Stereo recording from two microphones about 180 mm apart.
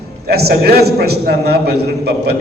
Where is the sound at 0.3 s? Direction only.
60° right (ahead or behind).